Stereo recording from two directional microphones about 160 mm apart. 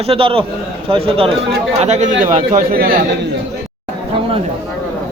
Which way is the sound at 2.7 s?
65° right (ahead or behind).